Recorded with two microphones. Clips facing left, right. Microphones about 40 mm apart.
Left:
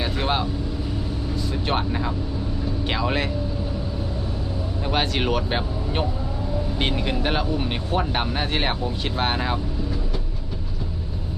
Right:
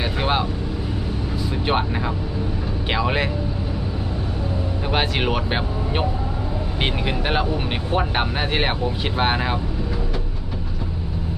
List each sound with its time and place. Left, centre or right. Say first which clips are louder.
0.0 s vehicle: right 2 dB; centre
1.6 s speech: right 3 dB; centre
4.9 s speech: right 1 dB; centre